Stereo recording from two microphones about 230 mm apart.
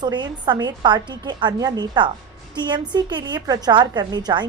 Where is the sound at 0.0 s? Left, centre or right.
Centre.